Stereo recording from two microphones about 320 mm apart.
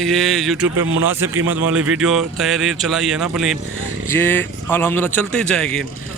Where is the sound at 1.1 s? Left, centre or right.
Centre.